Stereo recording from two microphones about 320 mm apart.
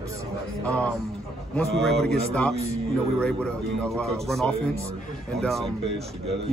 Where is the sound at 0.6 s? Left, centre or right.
Centre.